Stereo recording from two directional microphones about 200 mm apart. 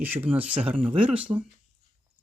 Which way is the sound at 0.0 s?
10° right (ahead or behind).